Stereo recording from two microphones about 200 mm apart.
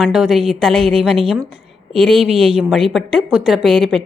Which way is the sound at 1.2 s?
30° right (ahead or behind).